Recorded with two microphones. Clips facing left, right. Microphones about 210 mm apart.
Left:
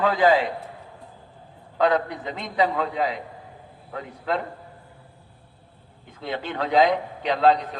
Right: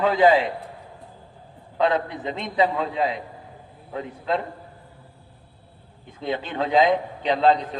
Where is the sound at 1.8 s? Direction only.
25° right (ahead or behind).